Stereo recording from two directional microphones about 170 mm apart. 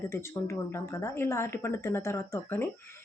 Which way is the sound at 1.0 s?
15° left (ahead or behind).